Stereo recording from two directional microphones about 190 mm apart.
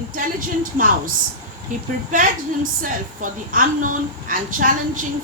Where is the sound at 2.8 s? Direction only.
45° right (ahead or behind).